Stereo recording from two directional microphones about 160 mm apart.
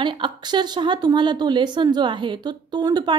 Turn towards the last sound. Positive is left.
turn(degrees=-25)  # may be behind; listen again after turning